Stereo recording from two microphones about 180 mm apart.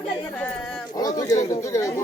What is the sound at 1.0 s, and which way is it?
Speech, 20° left (ahead or behind).